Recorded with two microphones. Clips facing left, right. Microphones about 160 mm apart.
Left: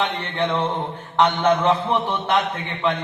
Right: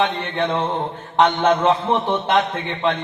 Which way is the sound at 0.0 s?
15° right (ahead or behind).